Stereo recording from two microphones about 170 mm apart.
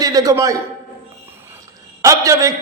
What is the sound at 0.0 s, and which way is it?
Speech, 20° right (ahead or behind).